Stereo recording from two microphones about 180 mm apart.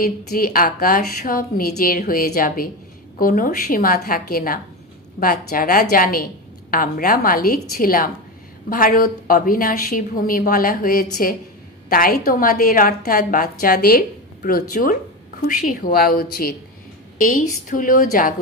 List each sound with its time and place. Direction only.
0.0 s a woman's voice: 55° left (ahead or behind)